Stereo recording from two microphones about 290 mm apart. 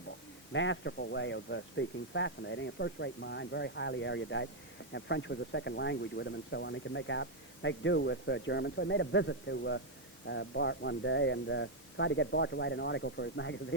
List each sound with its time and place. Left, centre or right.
0.5 s speech: left